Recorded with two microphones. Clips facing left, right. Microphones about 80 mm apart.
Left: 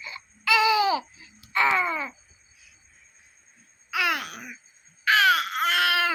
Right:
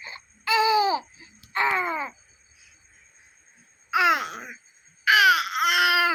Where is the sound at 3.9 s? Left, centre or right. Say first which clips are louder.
Right 6 dB; right.